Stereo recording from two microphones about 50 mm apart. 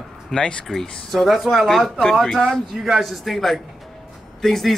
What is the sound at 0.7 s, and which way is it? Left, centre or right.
Speech, centre.